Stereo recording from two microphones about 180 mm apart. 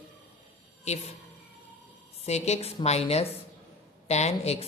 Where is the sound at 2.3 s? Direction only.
35° left (ahead or behind).